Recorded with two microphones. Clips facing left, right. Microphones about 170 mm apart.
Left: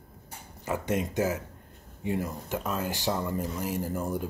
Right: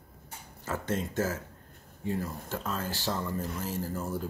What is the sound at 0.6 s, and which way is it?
Speech, 15° left (ahead or behind).